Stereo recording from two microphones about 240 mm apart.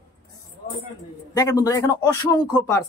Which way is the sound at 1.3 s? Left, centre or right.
Centre.